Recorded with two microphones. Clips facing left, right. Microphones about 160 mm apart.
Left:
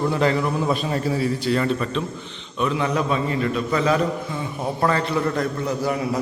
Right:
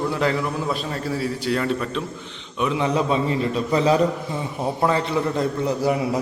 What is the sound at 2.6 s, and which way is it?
A man's voice, 20° right (ahead or behind).